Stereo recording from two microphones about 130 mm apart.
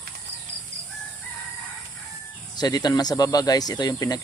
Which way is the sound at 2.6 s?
30° left (ahead or behind).